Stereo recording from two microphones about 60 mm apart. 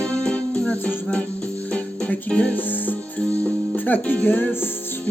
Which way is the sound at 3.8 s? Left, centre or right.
Left.